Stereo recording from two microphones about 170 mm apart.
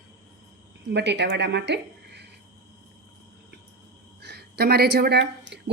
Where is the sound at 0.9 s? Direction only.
90° right.